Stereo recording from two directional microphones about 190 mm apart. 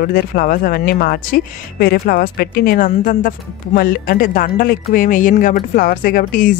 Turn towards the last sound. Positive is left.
turn(degrees=45)  # may be behind; listen again after turning